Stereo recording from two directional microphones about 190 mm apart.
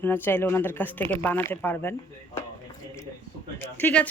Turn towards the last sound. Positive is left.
turn(degrees=10)  # may be behind; listen again after turning